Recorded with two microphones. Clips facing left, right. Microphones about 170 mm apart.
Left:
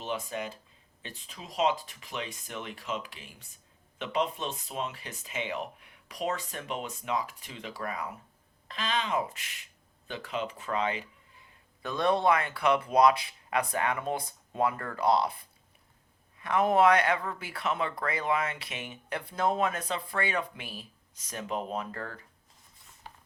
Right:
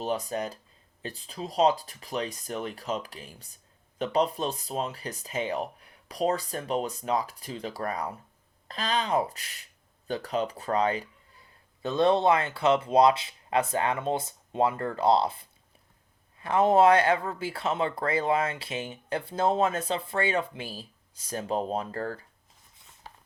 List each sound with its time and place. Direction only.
0.0 s speech: 40° right (ahead or behind)
11.8 s speech: 25° right (ahead or behind)